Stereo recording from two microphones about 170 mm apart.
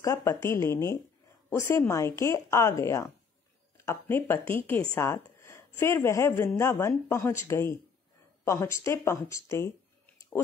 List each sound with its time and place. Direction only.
0.0 s speech: 15° left (ahead or behind)
4.9 s a sound: 15° left (ahead or behind)
5.8 s speech: 15° left (ahead or behind)